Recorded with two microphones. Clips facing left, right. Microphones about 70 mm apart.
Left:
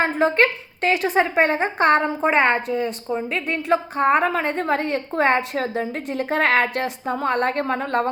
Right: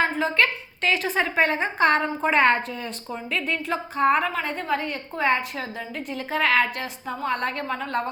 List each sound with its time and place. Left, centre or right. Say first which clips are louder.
0.0 s a woman's voice: left 4 dB; left
0.9 s a woman's voice: left 5 dB; left
5.7 s a woman's voice: left 7 dB; left